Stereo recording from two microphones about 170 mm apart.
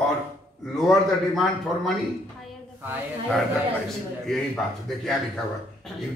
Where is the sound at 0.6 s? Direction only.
Centre (ahead or behind).